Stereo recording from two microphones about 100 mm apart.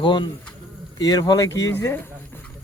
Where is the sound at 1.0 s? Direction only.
40° left (ahead or behind).